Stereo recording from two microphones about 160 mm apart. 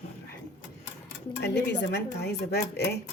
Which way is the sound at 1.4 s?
90° left.